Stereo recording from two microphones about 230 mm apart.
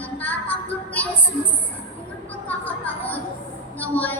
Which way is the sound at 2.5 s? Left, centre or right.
Centre.